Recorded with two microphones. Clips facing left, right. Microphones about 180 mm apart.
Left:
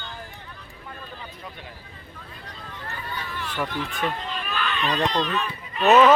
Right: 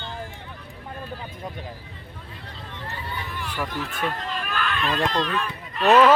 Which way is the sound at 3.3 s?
10° right (ahead or behind).